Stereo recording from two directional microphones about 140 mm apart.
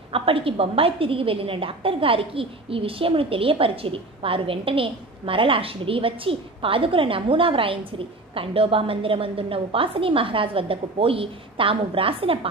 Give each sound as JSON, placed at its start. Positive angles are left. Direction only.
{"t": 0.1, "sound": "a woman's voice", "side_deg": -40}